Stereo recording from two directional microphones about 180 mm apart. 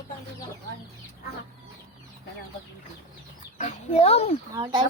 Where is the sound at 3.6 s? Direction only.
40° left (ahead or behind).